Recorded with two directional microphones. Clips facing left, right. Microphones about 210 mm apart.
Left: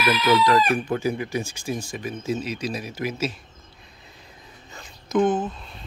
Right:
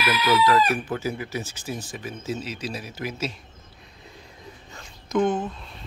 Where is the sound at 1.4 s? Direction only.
10° left (ahead or behind).